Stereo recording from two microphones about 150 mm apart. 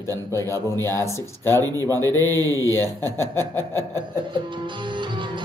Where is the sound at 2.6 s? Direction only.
15° left (ahead or behind).